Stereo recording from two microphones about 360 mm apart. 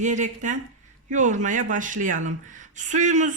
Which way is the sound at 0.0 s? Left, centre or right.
Centre.